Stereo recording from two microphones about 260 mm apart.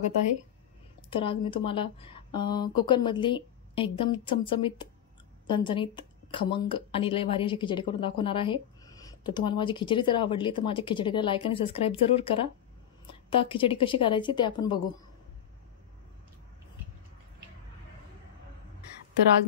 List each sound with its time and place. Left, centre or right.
1.1 s speech: centre